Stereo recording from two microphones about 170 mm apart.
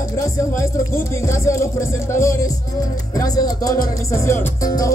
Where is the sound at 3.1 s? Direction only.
20° left (ahead or behind).